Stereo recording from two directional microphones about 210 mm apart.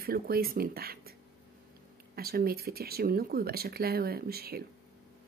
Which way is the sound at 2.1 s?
45° right (ahead or behind).